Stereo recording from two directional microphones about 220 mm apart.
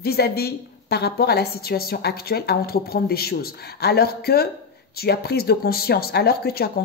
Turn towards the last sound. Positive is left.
turn(degrees=45)  # may be behind; listen again after turning